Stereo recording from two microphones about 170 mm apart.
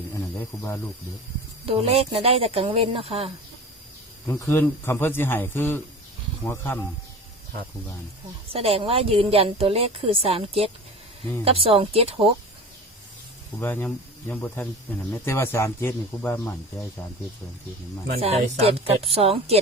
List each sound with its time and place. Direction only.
0.3 s speech: 15° left (ahead or behind)
1.6 s a woman's voice: 35° right (ahead or behind)
4.3 s speech: 15° left (ahead or behind)
8.5 s a woman's voice: 35° right (ahead or behind)
13.6 s speech: 10° left (ahead or behind)
18.2 s a woman's voice: 35° right (ahead or behind)